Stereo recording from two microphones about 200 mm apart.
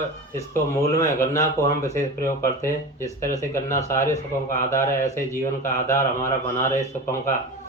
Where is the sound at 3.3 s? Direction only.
15° left (ahead or behind).